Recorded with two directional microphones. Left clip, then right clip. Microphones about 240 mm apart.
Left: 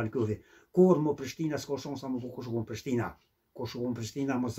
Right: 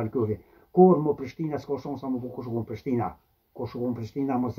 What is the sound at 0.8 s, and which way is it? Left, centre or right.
Speech, left.